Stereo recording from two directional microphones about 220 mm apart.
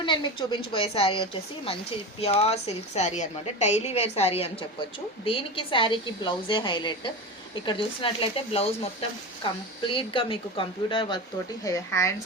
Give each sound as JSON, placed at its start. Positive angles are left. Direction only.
{"t": 0.0, "sound": "a woman's voice", "side_deg": 20}